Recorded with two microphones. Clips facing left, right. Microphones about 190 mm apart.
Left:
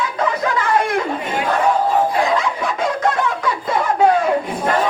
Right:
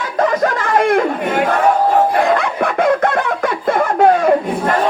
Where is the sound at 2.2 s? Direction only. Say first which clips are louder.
Right 4 dB; 60° right (ahead or behind).